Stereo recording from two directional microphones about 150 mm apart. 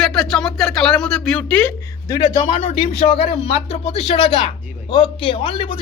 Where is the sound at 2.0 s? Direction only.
30° left (ahead or behind).